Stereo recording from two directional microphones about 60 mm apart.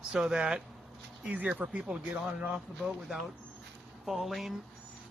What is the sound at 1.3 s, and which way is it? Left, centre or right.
Speech, right.